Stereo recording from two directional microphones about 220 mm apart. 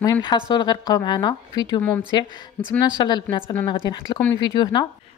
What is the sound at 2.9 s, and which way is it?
Speech, 20° left (ahead or behind).